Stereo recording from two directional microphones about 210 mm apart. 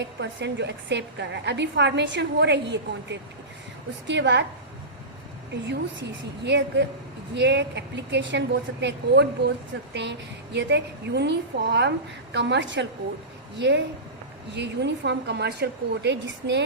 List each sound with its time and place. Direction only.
0.0 s a woman's voice: 55° right (ahead or behind)
5.6 s a woman's voice: 55° right (ahead or behind)